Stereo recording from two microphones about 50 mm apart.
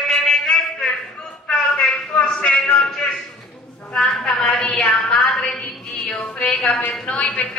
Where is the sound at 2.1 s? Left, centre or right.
Left.